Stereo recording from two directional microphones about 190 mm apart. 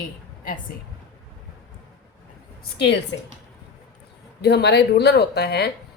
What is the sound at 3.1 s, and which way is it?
Speech, 80° left.